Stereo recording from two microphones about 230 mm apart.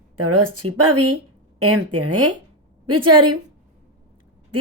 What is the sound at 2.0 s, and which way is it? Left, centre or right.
Speech, right.